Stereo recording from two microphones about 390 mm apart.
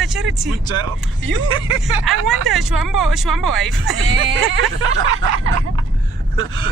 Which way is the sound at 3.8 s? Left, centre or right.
Right.